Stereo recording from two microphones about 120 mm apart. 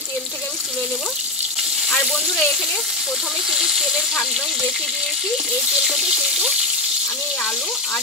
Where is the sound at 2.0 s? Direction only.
5° right (ahead or behind).